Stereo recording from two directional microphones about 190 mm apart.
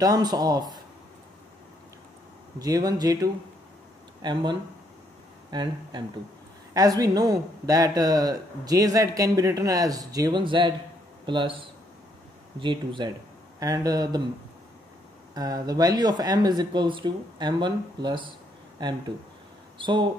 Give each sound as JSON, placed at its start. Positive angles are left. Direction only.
{"t": 0.0, "sound": "speech", "side_deg": -20}
{"t": 2.6, "sound": "speech", "side_deg": -20}
{"t": 15.3, "sound": "speech", "side_deg": -20}